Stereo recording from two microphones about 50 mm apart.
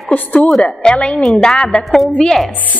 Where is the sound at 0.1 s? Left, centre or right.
Left.